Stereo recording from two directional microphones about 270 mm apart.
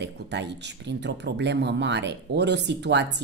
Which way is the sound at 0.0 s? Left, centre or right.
Right.